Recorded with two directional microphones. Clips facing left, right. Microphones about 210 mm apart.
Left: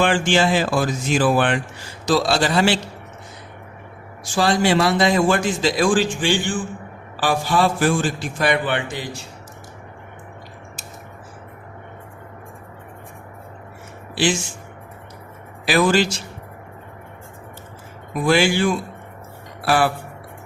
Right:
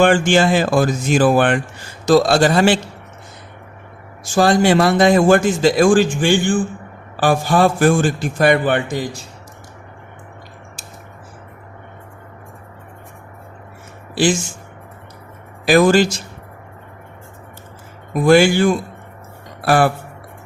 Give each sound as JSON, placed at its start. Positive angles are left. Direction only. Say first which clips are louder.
{"t": 0.0, "sound": "a man's voice", "louder": "right 5 dB", "side_deg": -45}
{"t": 4.4, "sound": "a man's voice", "louder": "right 4 dB", "side_deg": -50}
{"t": 15.6, "sound": "a man's voice", "louder": "right 5 dB", "side_deg": -45}
{"t": 18.1, "sound": "a man's voice", "louder": "right 6 dB", "side_deg": -45}